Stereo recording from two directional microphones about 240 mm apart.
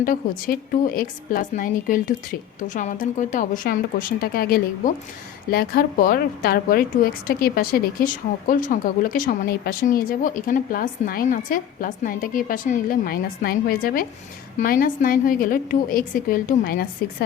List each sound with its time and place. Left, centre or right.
0.0 s speech: left